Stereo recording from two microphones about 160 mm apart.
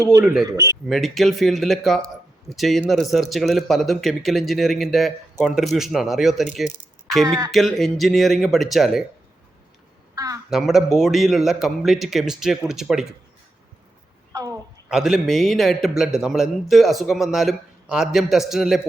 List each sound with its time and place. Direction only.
0.4 s speech: 20° right (ahead or behind)
0.9 s speech: centre (ahead or behind)
10.2 s a woman's voice: 20° right (ahead or behind)
10.5 s speech: centre (ahead or behind)
14.3 s a woman's voice: 20° right (ahead or behind)
14.8 s speech: 5° right (ahead or behind)